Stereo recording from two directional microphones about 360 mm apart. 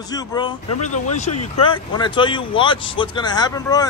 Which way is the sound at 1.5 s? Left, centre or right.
Centre.